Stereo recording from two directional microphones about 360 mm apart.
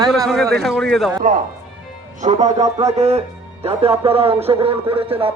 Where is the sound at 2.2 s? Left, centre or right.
Centre.